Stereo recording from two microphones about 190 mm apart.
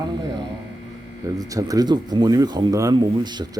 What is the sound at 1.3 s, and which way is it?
Speech, 20° right (ahead or behind).